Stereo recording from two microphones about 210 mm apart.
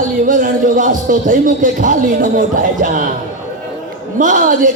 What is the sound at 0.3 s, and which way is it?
Speech, 40° right (ahead or behind).